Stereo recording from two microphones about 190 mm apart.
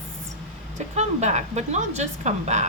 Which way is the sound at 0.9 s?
35° right (ahead or behind).